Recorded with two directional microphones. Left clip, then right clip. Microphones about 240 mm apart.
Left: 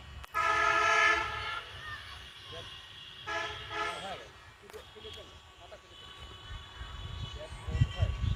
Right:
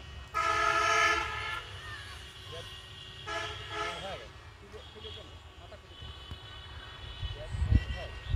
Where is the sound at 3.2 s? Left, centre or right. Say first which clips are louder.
Left 1 dB; right.